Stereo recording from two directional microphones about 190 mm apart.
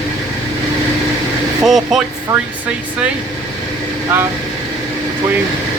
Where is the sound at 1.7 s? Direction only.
Centre (ahead or behind).